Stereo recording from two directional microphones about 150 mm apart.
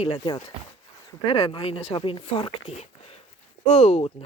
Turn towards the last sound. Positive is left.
turn(degrees=45)  # may be behind; listen again after turning